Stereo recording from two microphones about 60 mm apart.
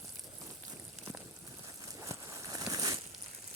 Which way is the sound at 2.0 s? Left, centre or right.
Right.